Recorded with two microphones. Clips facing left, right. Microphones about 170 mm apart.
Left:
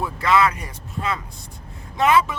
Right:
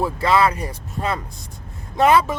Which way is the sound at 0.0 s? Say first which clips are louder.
Right 2 dB; 30° right (ahead or behind).